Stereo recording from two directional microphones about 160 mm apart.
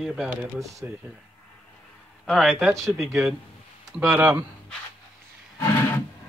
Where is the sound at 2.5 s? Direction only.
15° right (ahead or behind).